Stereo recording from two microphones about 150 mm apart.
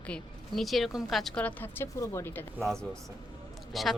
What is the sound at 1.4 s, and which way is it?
Speech, 10° left (ahead or behind).